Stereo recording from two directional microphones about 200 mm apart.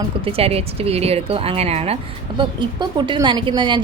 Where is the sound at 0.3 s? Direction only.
30° right (ahead or behind).